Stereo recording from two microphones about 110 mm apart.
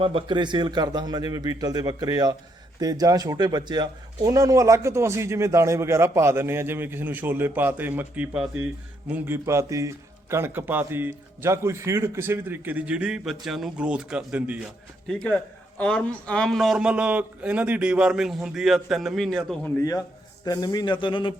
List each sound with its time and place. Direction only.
0.0 s a man's voice: 55° right (ahead or behind); by 14.7 s 10° right (ahead or behind)
15.0 s a man's voice: 10° left (ahead or behind)
20.4 s speech: 40° left (ahead or behind)